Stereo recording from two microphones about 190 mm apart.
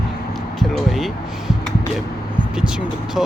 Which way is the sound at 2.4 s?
5° right (ahead or behind).